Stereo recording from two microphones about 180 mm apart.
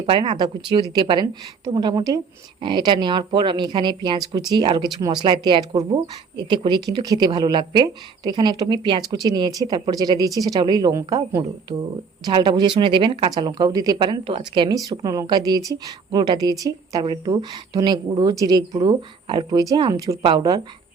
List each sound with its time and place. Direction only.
0.0 s a woman's voice: 30° right (ahead or behind)